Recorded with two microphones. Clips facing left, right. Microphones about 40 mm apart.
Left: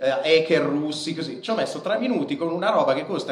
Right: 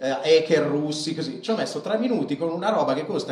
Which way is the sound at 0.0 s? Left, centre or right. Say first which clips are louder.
Even; left.